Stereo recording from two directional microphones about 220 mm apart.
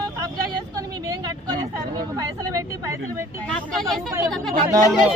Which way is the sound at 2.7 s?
15° right (ahead or behind).